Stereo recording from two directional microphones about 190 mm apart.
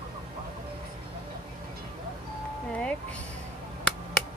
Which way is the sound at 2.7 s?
5° left (ahead or behind).